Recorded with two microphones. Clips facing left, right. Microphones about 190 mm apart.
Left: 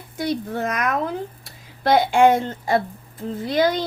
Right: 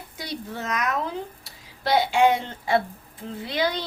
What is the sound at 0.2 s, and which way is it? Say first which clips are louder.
A woman's voice: left 9 dB; 50° left (ahead or behind).